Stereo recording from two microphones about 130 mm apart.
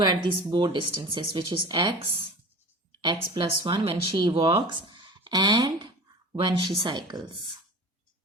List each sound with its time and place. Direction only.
0.0 s speech: 35° right (ahead or behind)